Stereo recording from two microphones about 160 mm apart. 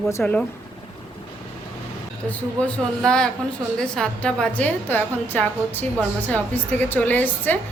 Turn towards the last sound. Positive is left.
turn(degrees=10)  # may be behind; listen again after turning